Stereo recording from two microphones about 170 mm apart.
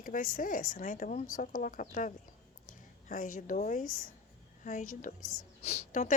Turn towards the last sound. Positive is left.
turn(degrees=40)  # may be behind; listen again after turning